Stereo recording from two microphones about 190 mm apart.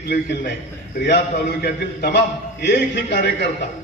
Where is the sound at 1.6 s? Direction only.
60° left (ahead or behind).